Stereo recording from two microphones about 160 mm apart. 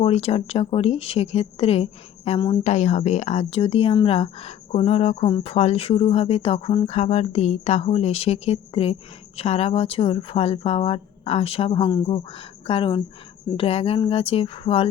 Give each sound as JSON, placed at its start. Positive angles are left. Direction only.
{"t": 0.0, "sound": "speech", "side_deg": 40}